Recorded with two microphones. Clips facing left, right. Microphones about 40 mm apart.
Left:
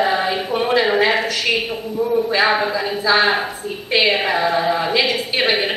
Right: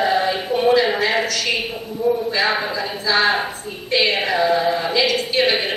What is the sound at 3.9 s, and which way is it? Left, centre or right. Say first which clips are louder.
Speech: left 1 dB; centre.